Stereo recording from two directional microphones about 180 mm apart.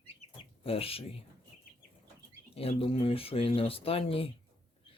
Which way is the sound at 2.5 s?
30° left (ahead or behind).